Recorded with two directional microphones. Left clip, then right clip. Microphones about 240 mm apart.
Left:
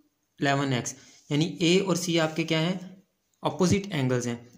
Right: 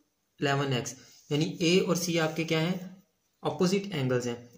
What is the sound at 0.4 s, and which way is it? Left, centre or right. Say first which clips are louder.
Speech: left 3 dB; left.